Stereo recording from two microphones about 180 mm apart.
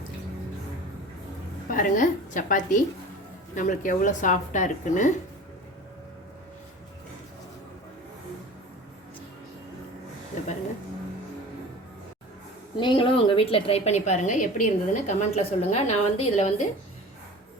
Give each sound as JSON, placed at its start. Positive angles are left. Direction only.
{"t": 1.7, "sound": "speech", "side_deg": 45}
{"t": 12.7, "sound": "a woman's voice", "side_deg": 25}